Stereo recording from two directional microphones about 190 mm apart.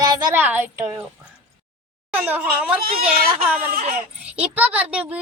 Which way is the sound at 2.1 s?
10° right (ahead or behind).